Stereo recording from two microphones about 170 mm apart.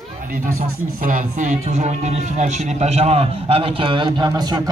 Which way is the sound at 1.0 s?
50° right (ahead or behind).